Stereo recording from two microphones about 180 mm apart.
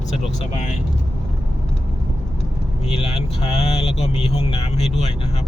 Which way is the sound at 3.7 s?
35° left (ahead or behind).